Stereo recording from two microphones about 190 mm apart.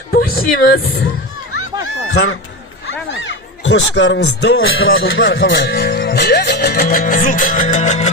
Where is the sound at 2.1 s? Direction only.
65° left (ahead or behind).